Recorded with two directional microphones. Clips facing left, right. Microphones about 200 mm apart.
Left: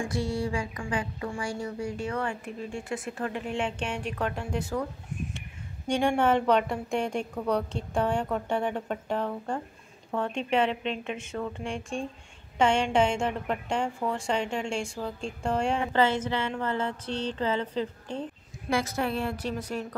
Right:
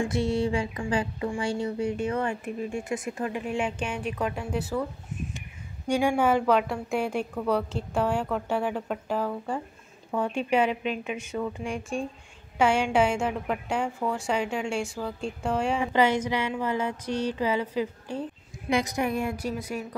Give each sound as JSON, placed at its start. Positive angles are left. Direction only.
{"t": 0.0, "sound": "a sound", "side_deg": -25}
{"t": 1.3, "sound": "a woman's voice", "side_deg": -25}
{"t": 15.9, "sound": "speech", "side_deg": -15}